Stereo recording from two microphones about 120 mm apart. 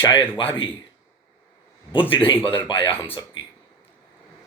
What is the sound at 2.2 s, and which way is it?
Speech, 45° left (ahead or behind).